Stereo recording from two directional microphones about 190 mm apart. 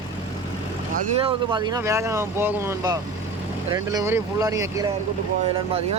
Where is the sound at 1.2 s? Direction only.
25° right (ahead or behind).